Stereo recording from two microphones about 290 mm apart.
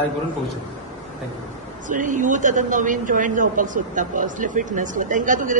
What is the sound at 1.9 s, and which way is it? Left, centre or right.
A woman's voice, right.